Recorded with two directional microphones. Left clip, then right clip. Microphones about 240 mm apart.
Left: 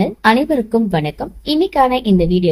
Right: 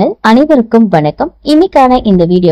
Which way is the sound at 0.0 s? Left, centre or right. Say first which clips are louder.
Right 6 dB; right.